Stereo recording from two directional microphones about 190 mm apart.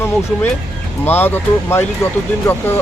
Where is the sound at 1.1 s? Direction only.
10° left (ahead or behind).